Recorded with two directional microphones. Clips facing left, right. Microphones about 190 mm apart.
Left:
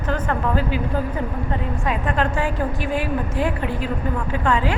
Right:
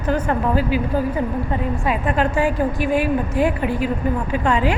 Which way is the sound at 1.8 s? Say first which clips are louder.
Right 1 dB; 10° right (ahead or behind).